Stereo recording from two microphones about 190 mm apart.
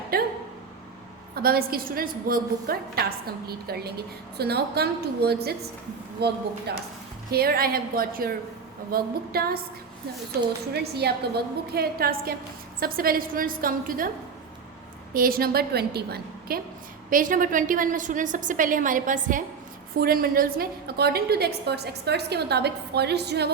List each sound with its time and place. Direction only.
0.1 s a sound: 50° right (ahead or behind)
1.4 s a woman's voice: 50° right (ahead or behind)
10.7 s a woman's voice: 60° right (ahead or behind)
15.1 s a woman's voice: 50° right (ahead or behind)
17.1 s a woman's voice: 45° right (ahead or behind); by 23.5 s 60° right (ahead or behind)